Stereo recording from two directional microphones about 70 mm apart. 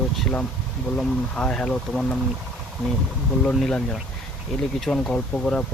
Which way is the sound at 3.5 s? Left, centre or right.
Centre.